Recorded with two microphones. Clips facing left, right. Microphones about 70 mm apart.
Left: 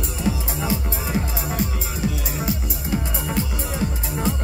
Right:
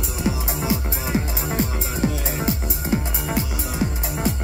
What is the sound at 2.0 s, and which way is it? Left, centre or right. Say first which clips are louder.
Music: right 3 dB; right.